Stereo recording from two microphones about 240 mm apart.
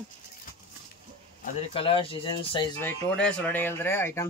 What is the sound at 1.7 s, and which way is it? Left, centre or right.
Speech, left.